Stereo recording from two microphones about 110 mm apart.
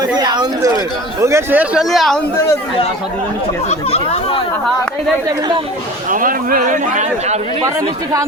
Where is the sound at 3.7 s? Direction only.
70° left (ahead or behind).